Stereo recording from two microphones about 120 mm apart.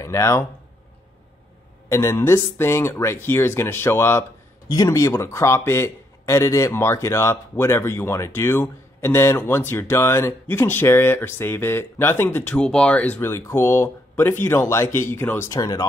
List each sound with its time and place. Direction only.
0.0 s speech: 25° left (ahead or behind)
1.9 s speech: 25° left (ahead or behind)